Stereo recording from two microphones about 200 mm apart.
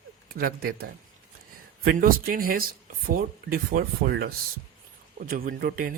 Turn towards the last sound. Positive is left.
turn(degrees=-45)  # may be behind; listen again after turning